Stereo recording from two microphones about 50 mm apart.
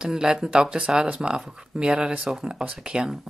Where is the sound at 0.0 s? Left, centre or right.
Centre.